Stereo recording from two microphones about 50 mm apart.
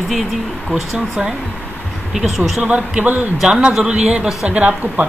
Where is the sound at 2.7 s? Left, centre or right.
Centre.